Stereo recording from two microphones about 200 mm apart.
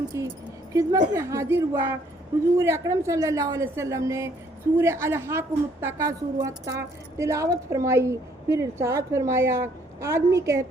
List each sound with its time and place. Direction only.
0.1 s a woman's voice: 15° right (ahead or behind)